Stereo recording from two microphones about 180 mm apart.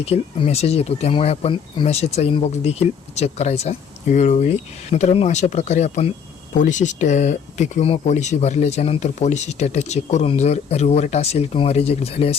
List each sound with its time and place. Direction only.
0.0 s speech: 35° left (ahead or behind)